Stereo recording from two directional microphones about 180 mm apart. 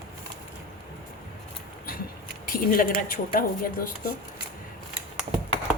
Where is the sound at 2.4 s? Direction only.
50° left (ahead or behind).